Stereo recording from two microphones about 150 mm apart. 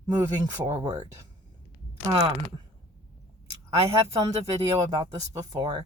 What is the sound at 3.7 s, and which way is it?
Speech, 15° right (ahead or behind).